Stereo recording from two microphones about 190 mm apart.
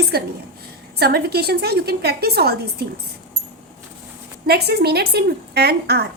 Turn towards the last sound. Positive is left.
turn(degrees=-60)  # may be behind; listen again after turning